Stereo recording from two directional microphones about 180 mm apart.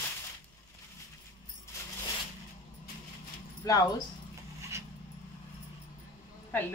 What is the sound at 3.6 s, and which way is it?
Speech, 20° left (ahead or behind).